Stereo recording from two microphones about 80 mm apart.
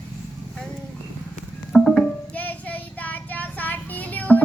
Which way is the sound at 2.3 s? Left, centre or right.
Left.